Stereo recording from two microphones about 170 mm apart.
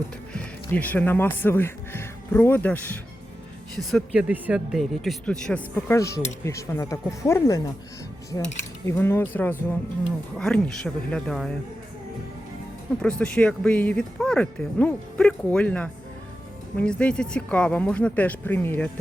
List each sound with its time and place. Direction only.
0.3 s speech: 10° left (ahead or behind)
3.8 s speech: centre (ahead or behind); by 7.7 s 20° left (ahead or behind)
8.9 s speech: 15° left (ahead or behind)
13.0 s speech: 5° left (ahead or behind)